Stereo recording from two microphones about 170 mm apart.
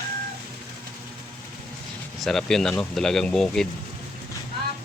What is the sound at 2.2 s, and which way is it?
Speech, 5° left (ahead or behind).